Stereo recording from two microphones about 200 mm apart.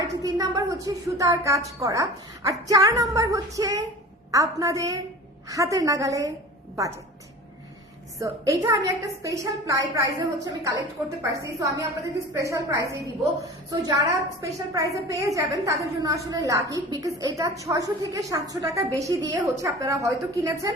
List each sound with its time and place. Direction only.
0.0 s a woman's voice: 15° right (ahead or behind)
8.2 s a woman's voice: 15° right (ahead or behind)